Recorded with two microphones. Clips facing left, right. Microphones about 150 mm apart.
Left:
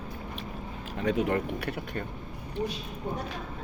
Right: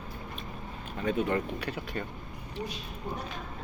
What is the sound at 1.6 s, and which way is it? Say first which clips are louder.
Speech: left 1 dB; 65° left (ahead or behind).